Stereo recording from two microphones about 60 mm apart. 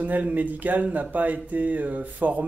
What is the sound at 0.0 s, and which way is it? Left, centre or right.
Speech, right.